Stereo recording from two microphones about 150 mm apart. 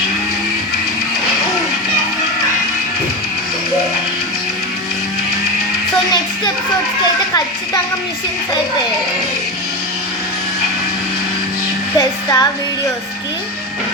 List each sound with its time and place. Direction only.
11.9 s music: 20° left (ahead or behind)